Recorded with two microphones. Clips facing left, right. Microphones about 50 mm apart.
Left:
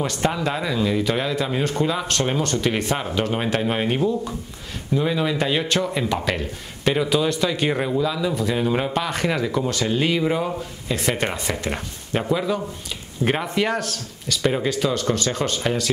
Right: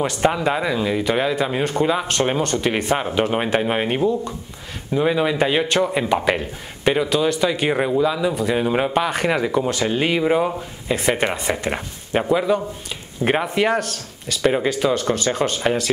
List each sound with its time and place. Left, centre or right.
0.0 s speech: centre
7.1 s speech: centre